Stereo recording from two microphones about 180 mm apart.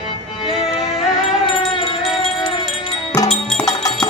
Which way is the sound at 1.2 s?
Centre (ahead or behind).